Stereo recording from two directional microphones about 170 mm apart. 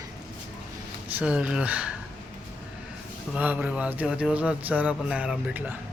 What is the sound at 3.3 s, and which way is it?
A man's voice, 10° right (ahead or behind).